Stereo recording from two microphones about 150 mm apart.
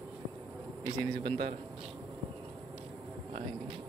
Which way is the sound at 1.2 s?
35° right (ahead or behind).